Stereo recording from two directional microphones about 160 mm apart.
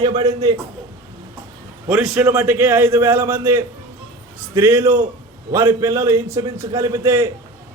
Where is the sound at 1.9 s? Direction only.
5° right (ahead or behind).